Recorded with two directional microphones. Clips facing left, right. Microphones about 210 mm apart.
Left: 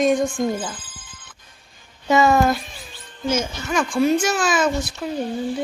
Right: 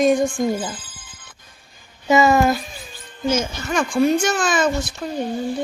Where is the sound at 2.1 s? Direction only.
5° right (ahead or behind).